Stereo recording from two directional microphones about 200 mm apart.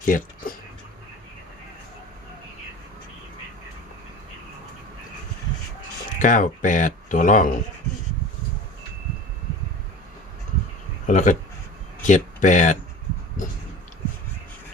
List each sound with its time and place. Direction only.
0.0 s speech: 45° left (ahead or behind)
6.1 s speech: 40° left (ahead or behind)
11.0 s speech: 40° left (ahead or behind)